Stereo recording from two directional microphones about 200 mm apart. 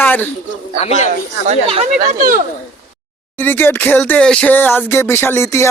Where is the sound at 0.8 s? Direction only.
35° left (ahead or behind).